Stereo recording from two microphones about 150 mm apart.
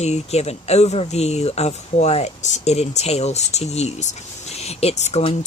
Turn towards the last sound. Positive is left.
turn(degrees=45)  # may be behind; listen again after turning